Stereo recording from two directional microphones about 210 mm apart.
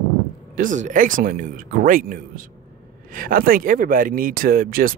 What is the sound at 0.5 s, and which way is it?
Speech, 35° right (ahead or behind).